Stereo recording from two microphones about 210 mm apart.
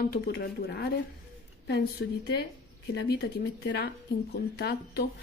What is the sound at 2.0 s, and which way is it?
Speech, 55° left (ahead or behind).